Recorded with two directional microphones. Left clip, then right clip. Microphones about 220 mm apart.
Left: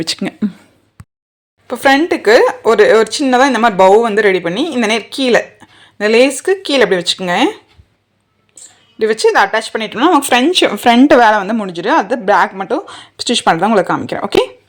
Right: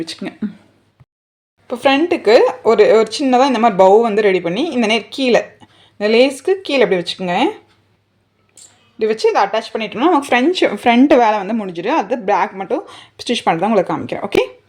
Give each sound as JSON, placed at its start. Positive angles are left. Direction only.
{"t": 0.0, "sound": "speech", "side_deg": 35}
{"t": 1.6, "sound": "speech", "side_deg": 0}
{"t": 9.0, "sound": "speech", "side_deg": 5}